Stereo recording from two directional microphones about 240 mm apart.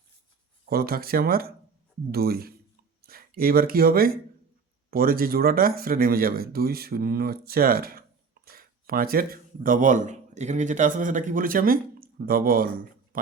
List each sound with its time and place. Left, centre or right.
0.7 s speech: right